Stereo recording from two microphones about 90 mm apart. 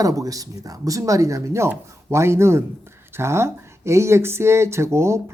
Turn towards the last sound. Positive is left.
turn(degrees=-30)  # may be behind; listen again after turning